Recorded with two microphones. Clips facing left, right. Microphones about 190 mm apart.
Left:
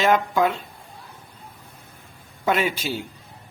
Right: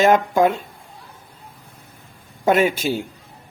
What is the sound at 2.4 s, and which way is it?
Speech, 50° right (ahead or behind).